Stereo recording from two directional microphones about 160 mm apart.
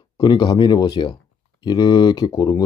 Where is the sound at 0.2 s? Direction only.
25° left (ahead or behind).